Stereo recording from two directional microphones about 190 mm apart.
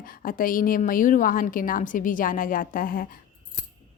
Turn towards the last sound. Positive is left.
turn(degrees=45)  # may be behind; listen again after turning